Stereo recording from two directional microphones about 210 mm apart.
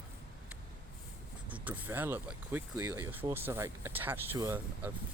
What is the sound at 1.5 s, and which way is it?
Speech, 5° right (ahead or behind).